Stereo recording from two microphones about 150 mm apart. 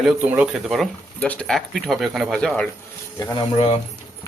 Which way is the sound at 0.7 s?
5° left (ahead or behind).